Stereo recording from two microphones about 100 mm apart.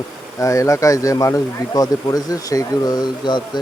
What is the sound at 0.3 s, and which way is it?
Speech, 35° left (ahead or behind).